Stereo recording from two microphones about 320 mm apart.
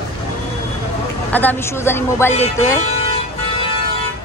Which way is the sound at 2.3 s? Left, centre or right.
Left.